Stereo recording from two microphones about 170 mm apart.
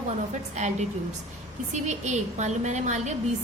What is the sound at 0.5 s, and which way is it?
A woman's voice, 45° right (ahead or behind).